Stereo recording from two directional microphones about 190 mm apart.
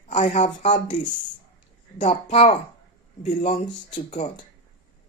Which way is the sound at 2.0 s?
40° left (ahead or behind).